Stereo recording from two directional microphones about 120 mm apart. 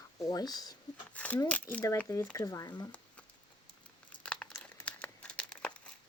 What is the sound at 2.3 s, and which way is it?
Speech, 30° left (ahead or behind).